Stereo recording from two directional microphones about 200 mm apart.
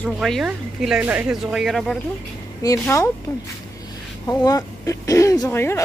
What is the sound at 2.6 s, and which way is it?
Speech, 15° left (ahead or behind).